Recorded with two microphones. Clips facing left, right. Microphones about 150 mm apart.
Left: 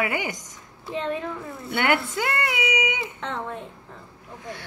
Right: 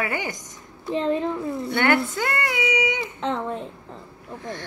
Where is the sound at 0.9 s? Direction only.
25° right (ahead or behind).